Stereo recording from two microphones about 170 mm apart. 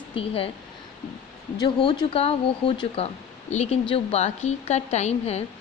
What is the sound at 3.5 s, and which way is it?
Speech, 40° left (ahead or behind).